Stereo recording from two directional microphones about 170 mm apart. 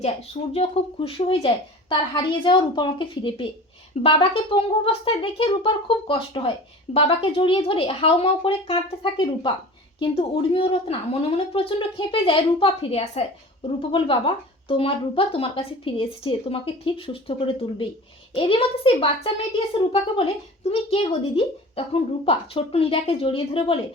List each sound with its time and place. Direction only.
0.5 s a woman's voice: 35° left (ahead or behind)